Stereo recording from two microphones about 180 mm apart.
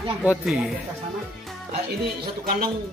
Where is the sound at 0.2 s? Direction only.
5° right (ahead or behind).